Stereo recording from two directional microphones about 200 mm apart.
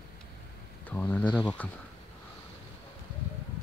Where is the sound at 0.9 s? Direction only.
5° left (ahead or behind).